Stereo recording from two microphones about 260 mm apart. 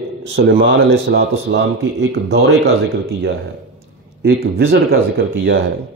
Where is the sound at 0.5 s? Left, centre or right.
Right.